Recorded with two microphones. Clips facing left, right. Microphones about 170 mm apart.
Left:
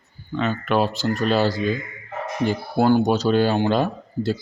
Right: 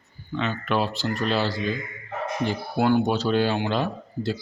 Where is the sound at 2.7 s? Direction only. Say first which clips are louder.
Left 3 dB; 40° left (ahead or behind).